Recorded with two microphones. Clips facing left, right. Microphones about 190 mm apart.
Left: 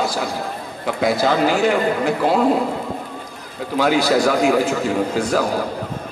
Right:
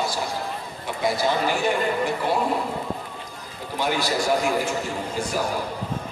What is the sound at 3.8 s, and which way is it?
Speech, 90° left.